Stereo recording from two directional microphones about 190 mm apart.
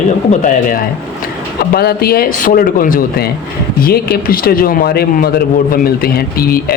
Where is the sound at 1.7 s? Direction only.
55° left (ahead or behind).